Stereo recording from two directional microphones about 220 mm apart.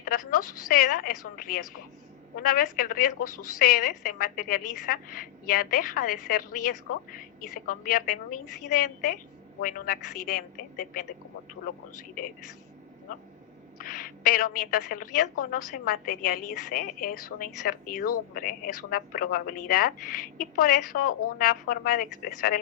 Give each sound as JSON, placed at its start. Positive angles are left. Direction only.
{"t": 0.0, "sound": "a woman's voice", "side_deg": 40}
{"t": 13.7, "sound": "a woman's voice", "side_deg": 40}